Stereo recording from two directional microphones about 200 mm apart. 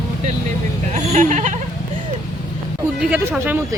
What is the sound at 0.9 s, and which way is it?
Speech, 35° right (ahead or behind).